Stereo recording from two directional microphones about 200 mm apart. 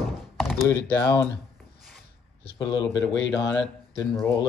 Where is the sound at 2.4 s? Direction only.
25° left (ahead or behind).